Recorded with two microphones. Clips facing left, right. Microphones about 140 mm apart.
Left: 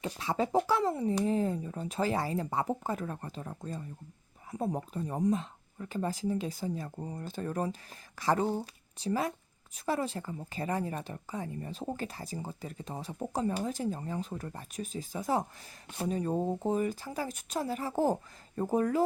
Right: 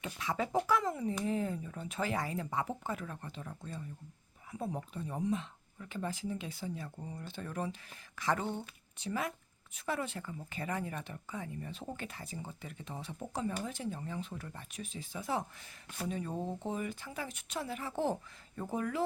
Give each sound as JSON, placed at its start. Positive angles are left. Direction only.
{"t": 0.0, "sound": "speech", "side_deg": 35}